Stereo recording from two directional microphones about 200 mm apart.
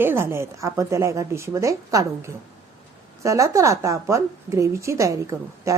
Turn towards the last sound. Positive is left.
turn(degrees=-15)  # may be behind; listen again after turning